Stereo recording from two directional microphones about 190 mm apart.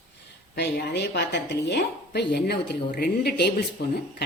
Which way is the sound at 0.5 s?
60° left (ahead or behind).